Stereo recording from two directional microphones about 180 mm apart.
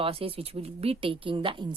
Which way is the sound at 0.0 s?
30° right (ahead or behind).